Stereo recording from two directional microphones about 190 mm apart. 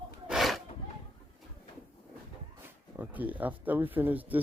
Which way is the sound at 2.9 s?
10° right (ahead or behind).